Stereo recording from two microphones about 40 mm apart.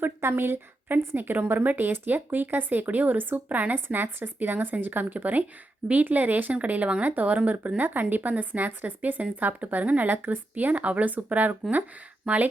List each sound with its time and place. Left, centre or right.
0.2 s a woman's voice: right
3.8 s a woman's voice: right
7.8 s a woman's voice: right
12.3 s speech: right